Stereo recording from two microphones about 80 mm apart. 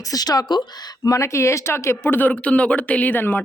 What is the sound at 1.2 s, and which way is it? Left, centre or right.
Speech, left.